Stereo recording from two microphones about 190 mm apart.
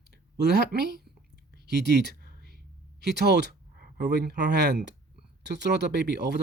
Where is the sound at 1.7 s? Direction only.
60° right (ahead or behind).